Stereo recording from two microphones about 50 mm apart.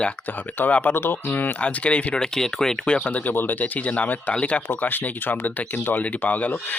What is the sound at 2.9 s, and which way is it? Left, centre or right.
Speech, left.